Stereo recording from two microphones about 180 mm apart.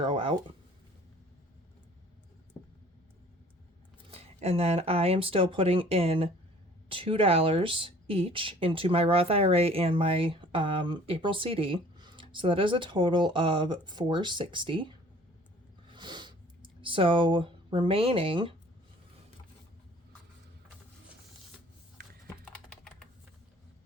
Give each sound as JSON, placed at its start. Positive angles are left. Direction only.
{"t": 0.0, "sound": "speech", "side_deg": -30}
{"t": 4.1, "sound": "speech", "side_deg": -35}
{"t": 15.9, "sound": "a sound", "side_deg": -25}
{"t": 22.0, "sound": "typing", "side_deg": -55}
{"t": 22.4, "sound": "typing", "side_deg": 5}